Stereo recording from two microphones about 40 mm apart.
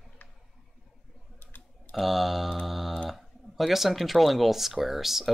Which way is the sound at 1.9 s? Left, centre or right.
Centre.